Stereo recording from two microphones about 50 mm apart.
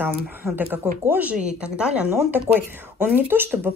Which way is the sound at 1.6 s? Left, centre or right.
Right.